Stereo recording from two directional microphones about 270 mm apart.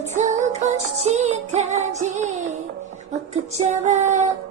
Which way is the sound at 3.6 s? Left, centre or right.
Right.